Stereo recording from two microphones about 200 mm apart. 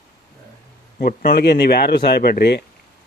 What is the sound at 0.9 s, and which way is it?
Speech, 50° left (ahead or behind).